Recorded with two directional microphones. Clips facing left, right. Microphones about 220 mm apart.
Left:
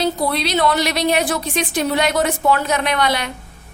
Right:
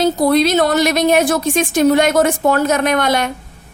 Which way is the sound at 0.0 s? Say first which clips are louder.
Right 7 dB; 45° right (ahead or behind).